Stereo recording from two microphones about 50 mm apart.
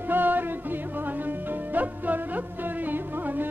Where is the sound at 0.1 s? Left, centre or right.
Right.